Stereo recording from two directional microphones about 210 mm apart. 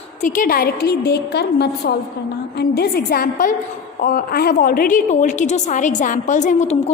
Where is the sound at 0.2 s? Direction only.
40° left (ahead or behind).